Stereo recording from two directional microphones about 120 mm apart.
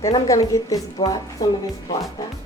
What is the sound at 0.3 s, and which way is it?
A woman's voice, 30° left (ahead or behind).